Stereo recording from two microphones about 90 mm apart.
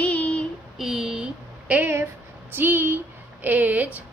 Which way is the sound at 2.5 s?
25° right (ahead or behind).